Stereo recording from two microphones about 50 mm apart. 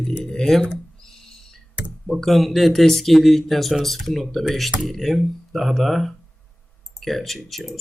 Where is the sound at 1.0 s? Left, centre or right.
Centre.